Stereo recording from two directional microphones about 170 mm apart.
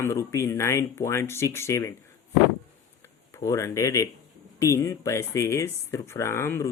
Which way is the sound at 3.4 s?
20° left (ahead or behind).